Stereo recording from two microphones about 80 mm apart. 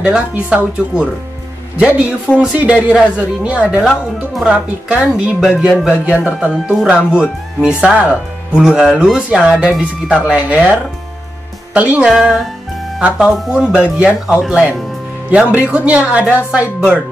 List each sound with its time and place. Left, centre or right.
0.0 s speech: centre
12.1 s speech: centre